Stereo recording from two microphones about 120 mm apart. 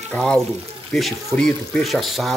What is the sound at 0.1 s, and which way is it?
Speech, 5° left (ahead or behind).